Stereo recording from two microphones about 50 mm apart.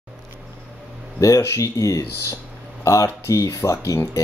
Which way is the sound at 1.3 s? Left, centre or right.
Left.